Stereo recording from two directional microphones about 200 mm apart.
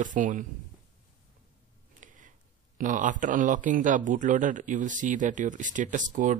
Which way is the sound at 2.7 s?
40° right (ahead or behind).